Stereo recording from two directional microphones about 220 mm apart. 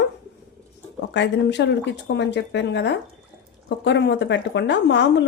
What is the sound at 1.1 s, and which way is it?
A woman's voice, 50° left (ahead or behind).